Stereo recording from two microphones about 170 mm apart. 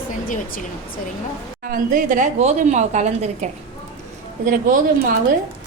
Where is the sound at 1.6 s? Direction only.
55° right (ahead or behind).